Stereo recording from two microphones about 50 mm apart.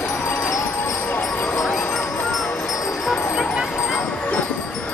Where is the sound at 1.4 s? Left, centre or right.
Left.